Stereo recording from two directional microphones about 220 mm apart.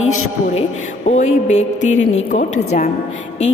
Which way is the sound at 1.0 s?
30° left (ahead or behind).